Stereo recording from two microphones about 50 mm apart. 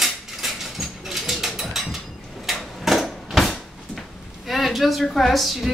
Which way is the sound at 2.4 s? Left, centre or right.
Centre.